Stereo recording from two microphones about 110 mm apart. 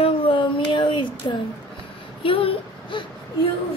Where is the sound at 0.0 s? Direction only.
50° left (ahead or behind).